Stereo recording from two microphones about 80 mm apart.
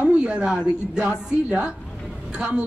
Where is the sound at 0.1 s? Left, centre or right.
Centre.